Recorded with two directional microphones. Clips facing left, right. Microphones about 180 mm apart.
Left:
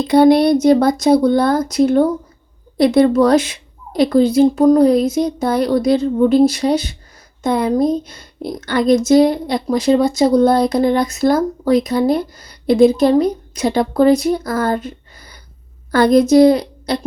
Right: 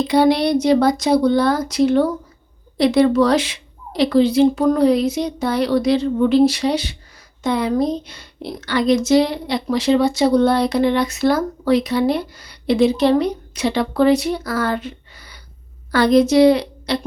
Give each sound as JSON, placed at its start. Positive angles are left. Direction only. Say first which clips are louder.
{"t": 0.1, "sound": "a woman's voice", "louder": "left 6 dB", "side_deg": 50}